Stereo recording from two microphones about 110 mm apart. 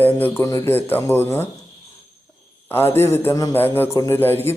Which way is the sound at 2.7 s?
20° left (ahead or behind).